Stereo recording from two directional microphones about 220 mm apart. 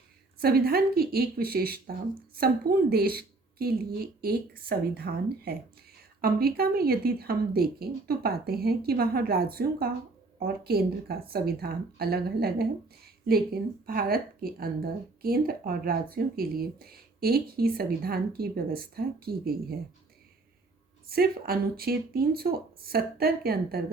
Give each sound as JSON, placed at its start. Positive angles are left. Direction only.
{"t": 0.3, "sound": "speech", "side_deg": -45}
{"t": 21.1, "sound": "speech", "side_deg": -45}